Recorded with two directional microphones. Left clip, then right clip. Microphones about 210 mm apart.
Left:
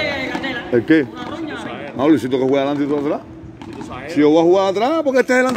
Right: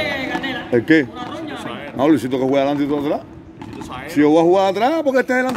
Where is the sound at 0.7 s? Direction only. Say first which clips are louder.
Even; 15° right (ahead or behind).